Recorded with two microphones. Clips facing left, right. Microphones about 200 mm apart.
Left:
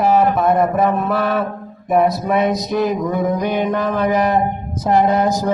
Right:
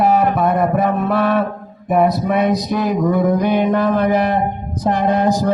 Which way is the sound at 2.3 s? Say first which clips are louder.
Right 1 dB; 45° left (ahead or behind).